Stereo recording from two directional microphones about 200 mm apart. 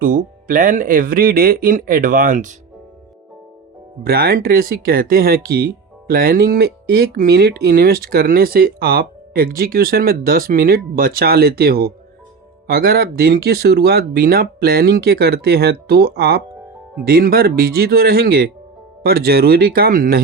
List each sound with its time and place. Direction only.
0.0 s speech: 45° right (ahead or behind)
4.0 s speech: 50° right (ahead or behind)